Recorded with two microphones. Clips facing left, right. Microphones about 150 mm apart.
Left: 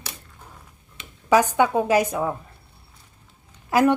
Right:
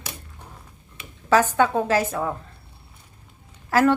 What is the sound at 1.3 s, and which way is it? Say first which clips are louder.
Speech: left 1 dB; 15° left (ahead or behind).